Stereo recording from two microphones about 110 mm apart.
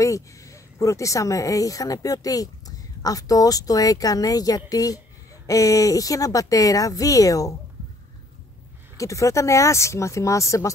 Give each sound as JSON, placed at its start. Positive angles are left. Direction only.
{"t": 0.0, "sound": "speech", "side_deg": 30}
{"t": 8.9, "sound": "speech", "side_deg": 30}